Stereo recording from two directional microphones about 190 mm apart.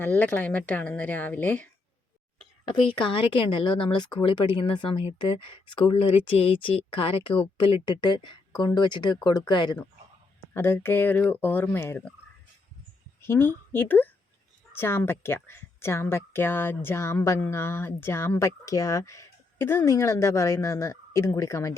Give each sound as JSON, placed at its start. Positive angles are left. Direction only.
{"t": 0.0, "sound": "a woman's voice", "side_deg": 10}
{"t": 2.7, "sound": "speech", "side_deg": 25}
{"t": 10.5, "sound": "a woman's voice", "side_deg": 10}
{"t": 13.2, "sound": "a woman's voice", "side_deg": 10}